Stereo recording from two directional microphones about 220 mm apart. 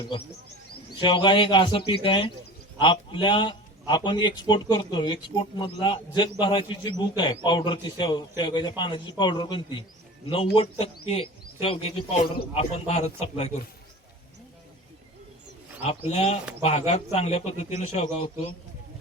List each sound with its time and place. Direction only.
0.9 s a man's voice: 20° left (ahead or behind)
15.8 s a man's voice: 30° left (ahead or behind)